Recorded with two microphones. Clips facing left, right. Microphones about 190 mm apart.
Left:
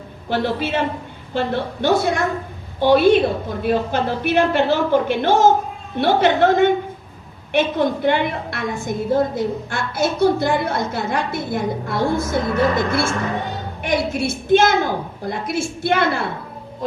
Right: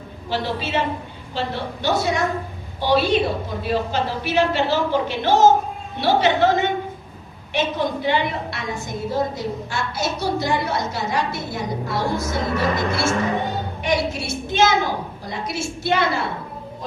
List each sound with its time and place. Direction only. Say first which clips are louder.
0.3 s a woman's voice: left 4 dB; 55° left (ahead or behind)